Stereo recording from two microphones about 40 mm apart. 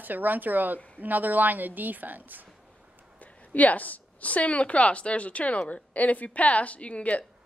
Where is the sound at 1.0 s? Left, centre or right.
Right.